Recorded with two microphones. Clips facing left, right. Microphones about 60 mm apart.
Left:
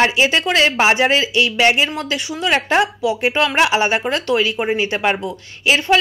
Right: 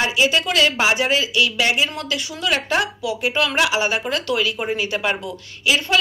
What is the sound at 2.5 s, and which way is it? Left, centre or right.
A woman's voice, left.